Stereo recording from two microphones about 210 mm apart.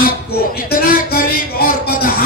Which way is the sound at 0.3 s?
45° left (ahead or behind).